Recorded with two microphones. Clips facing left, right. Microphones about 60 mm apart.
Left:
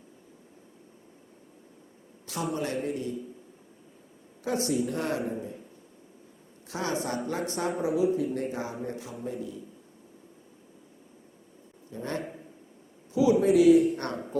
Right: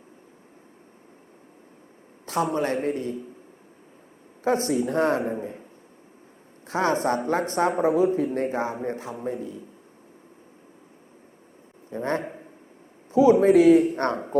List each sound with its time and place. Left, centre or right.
2.2 s speech: right
4.4 s speech: right
6.7 s speech: right
11.9 s a man's voice: right